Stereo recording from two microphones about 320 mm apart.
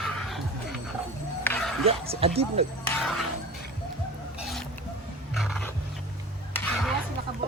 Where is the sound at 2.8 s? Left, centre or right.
Centre.